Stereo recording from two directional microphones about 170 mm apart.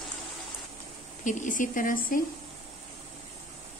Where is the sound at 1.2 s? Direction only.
50° left (ahead or behind).